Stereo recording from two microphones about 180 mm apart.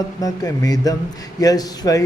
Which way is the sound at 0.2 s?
20° left (ahead or behind).